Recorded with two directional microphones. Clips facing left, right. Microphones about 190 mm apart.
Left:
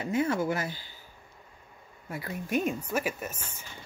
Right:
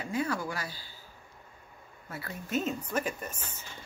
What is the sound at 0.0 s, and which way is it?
Speech, 25° left (ahead or behind).